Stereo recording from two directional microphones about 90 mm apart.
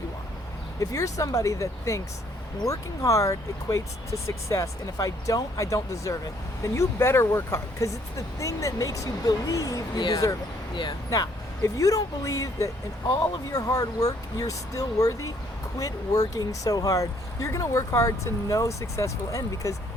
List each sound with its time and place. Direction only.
0.8 s speech: 40° left (ahead or behind)
11.1 s speech: 40° left (ahead or behind)